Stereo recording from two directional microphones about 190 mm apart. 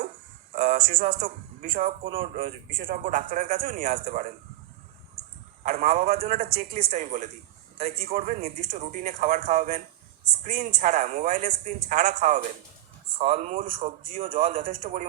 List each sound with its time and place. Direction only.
0.5 s a sound: 45° right (ahead or behind)
1.2 s speech: 45° right (ahead or behind)
2.0 s speech: 30° right (ahead or behind)
2.7 s speech: 50° right (ahead or behind)
5.9 s a man's voice: 35° right (ahead or behind)
13.1 s speech: 30° right (ahead or behind)
13.7 s speech: 25° right (ahead or behind)
14.3 s a man's voice: 45° right (ahead or behind)